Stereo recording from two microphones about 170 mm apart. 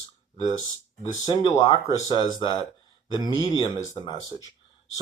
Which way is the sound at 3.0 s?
25° left (ahead or behind).